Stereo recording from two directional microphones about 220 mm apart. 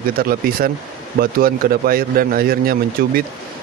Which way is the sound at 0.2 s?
40° right (ahead or behind).